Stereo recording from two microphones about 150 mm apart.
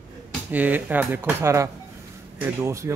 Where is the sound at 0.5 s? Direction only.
10° right (ahead or behind).